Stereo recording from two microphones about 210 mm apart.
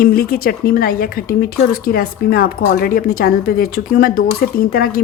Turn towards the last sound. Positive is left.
turn(degrees=45)  # may be behind; listen again after turning